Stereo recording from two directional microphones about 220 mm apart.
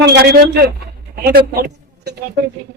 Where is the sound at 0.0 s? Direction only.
50° right (ahead or behind).